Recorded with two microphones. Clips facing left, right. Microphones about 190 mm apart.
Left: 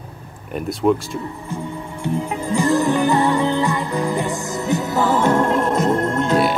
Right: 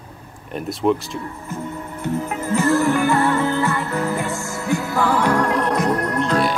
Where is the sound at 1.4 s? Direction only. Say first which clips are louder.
Left 1 dB; 15° left (ahead or behind).